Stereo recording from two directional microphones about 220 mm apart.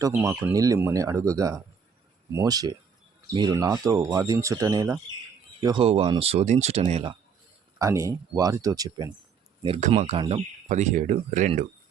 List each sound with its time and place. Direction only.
0.0 s speech: 10° right (ahead or behind); by 7.1 s 30° right (ahead or behind)
7.8 s speech: 15° right (ahead or behind); by 11.6 s 30° right (ahead or behind)